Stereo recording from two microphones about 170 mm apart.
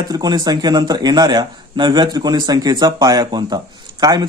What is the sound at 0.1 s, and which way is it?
Speech, 25° right (ahead or behind).